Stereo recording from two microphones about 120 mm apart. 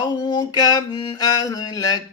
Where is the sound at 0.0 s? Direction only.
35° left (ahead or behind).